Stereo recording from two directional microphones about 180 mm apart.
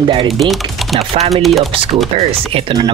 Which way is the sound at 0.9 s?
35° right (ahead or behind).